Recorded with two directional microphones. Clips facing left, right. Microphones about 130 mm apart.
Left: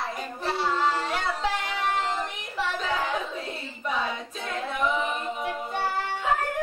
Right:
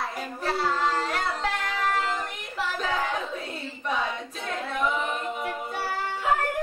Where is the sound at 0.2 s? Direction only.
Centre (ahead or behind).